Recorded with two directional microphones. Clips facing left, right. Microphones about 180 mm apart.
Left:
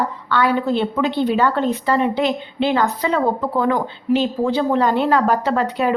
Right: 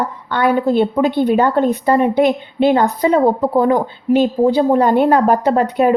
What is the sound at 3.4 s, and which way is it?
Speech, 35° right (ahead or behind).